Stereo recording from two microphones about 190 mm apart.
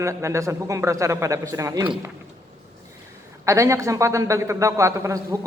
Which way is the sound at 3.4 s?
15° right (ahead or behind).